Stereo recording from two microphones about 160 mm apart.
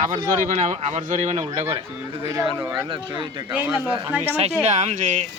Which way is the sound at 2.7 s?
30° right (ahead or behind).